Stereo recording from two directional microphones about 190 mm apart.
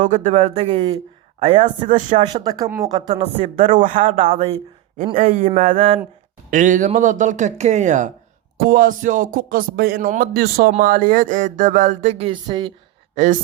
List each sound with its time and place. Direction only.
0.0 s speech: 40° right (ahead or behind)
1.8 s speech: 40° right (ahead or behind)
2.2 s speech: 20° right (ahead or behind)
3.2 s speech: 35° right (ahead or behind)
4.2 s speech: 30° right (ahead or behind)
5.6 s speech: 30° right (ahead or behind)
6.5 s speech: 45° right (ahead or behind); by 12.7 s 25° right (ahead or behind)
13.1 s speech: 40° right (ahead or behind)